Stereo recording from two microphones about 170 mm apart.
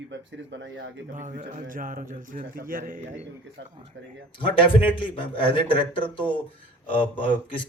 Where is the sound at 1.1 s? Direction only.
50° right (ahead or behind).